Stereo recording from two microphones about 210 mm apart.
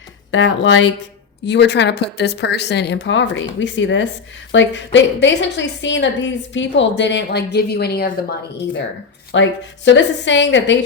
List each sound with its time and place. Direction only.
0.3 s a woman's voice: 60° left (ahead or behind)
9.3 s a woman's voice: 60° left (ahead or behind)